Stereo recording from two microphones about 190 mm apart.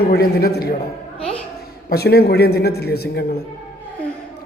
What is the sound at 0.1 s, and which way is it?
Speech, 55° left (ahead or behind).